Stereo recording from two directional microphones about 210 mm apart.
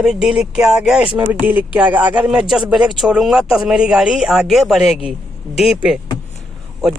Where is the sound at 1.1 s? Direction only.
20° right (ahead or behind).